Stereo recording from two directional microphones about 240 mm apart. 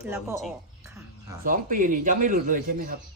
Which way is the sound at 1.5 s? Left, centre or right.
Right.